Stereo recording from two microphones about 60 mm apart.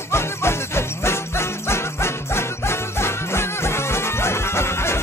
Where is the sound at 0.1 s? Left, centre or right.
Left.